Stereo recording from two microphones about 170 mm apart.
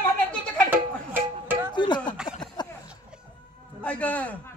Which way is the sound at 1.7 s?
25° left (ahead or behind).